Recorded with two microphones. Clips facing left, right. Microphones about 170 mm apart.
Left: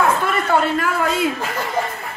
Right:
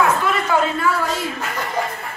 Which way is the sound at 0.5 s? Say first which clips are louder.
Left 1 dB; 55° left (ahead or behind).